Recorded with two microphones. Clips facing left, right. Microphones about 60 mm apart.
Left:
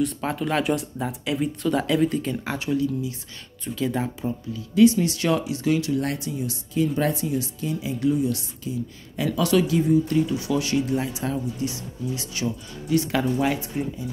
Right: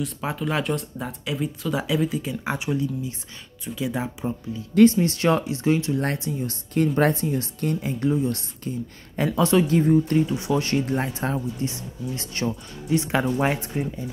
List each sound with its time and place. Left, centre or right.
0.0 s speech: centre
2.4 s speech: centre
5.0 s a woman's voice: right
6.4 s a woman's voice: right
10.2 s speech: right
10.7 s a woman's voice: right
12.4 s a woman's voice: right